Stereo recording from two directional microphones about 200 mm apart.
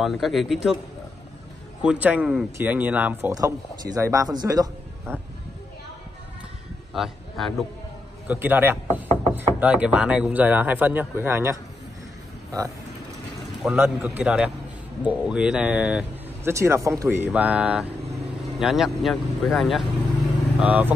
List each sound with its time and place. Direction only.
0.0 s speech: centre (ahead or behind)
1.8 s speech: 5° right (ahead or behind)
6.9 s a man's voice: centre (ahead or behind)
8.3 s speech: 10° right (ahead or behind)
13.4 s a sound: centre (ahead or behind)
13.7 s speech: 10° right (ahead or behind)